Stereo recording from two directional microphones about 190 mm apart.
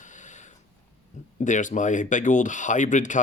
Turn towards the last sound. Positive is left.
turn(degrees=40)  # may be behind; listen again after turning